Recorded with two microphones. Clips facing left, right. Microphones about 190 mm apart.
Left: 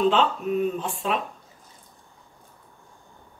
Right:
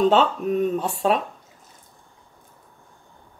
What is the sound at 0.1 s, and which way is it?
Speech, 40° right (ahead or behind).